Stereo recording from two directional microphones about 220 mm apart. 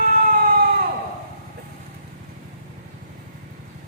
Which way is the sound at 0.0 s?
40° right (ahead or behind).